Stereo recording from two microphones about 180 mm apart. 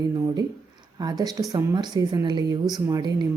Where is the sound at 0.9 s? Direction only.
20° right (ahead or behind).